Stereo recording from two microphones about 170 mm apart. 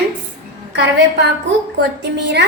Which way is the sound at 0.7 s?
90° right.